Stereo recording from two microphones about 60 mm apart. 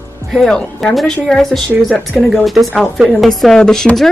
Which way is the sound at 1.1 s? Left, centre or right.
Centre.